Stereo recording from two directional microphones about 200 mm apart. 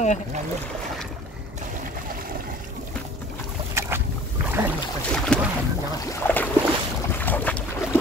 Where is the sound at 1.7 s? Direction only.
45° right (ahead or behind).